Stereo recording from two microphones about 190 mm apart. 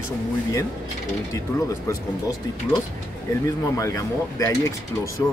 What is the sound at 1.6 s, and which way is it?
Speech, 15° left (ahead or behind).